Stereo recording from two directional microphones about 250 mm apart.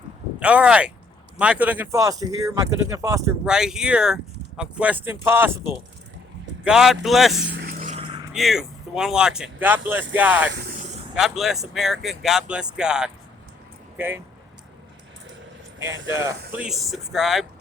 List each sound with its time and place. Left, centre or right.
0.3 s speech: centre
7.4 s vehicle: right
7.9 s vehicle: right
8.3 s speech: centre
10.5 s speech: right
11.1 s speech: centre
16.1 s speech: centre
16.6 s speech: centre